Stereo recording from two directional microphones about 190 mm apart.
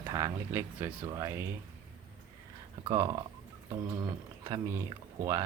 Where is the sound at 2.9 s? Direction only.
20° right (ahead or behind).